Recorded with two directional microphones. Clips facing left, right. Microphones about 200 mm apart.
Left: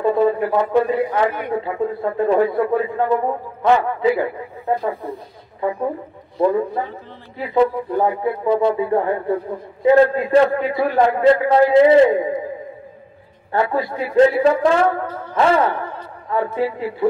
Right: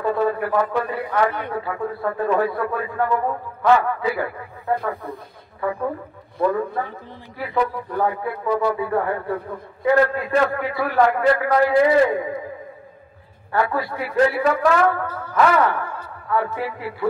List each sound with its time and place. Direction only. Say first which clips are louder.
0.0 s a man's voice: left 4 dB; 20° left (ahead or behind)
13.5 s a man's voice: left 2 dB; 25° left (ahead or behind)